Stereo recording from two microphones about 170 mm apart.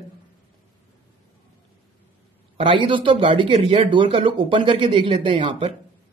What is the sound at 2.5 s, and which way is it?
Speech, 30° right (ahead or behind).